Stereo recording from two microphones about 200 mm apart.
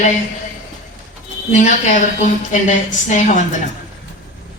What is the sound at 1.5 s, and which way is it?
A man's voice, 35° left (ahead or behind).